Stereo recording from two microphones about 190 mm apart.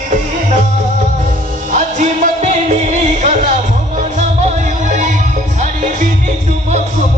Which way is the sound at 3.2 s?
35° right (ahead or behind).